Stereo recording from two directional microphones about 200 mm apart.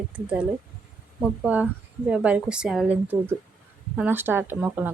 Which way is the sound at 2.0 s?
5° right (ahead or behind).